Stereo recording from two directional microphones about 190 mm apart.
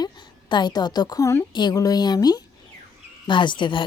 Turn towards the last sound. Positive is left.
turn(degrees=25)  # may be behind; listen again after turning